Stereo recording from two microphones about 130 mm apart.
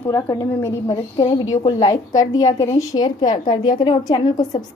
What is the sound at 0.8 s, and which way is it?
A woman's voice, 35° left (ahead or behind).